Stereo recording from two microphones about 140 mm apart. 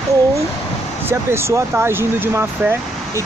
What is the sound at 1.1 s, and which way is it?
Speech, 15° right (ahead or behind).